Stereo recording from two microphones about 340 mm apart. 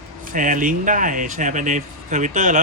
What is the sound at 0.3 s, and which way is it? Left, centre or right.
Speech, right.